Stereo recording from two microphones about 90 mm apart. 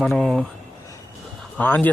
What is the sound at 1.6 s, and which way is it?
Speech, 20° left (ahead or behind).